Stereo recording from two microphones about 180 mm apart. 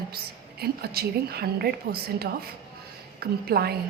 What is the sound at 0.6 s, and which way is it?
A woman's voice, 60° right (ahead or behind).